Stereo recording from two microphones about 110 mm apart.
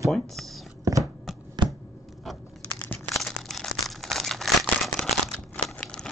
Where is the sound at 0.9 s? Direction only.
30° right (ahead or behind).